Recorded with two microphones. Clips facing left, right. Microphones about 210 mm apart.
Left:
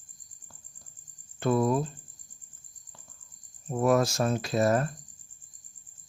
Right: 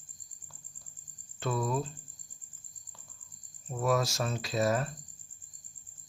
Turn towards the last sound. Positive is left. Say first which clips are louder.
# left 4 dB
turn(degrees=50)  # may be behind; listen again after turning